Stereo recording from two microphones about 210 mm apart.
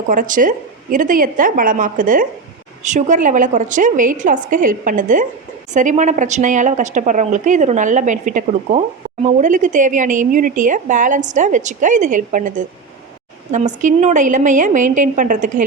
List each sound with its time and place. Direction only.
0.1 s speech: 40° right (ahead or behind)